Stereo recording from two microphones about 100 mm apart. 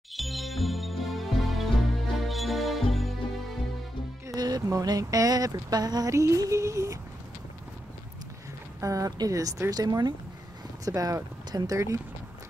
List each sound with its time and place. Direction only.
0.1 s music: centre (ahead or behind)
4.3 s speech: 40° right (ahead or behind)
8.8 s speech: 35° right (ahead or behind)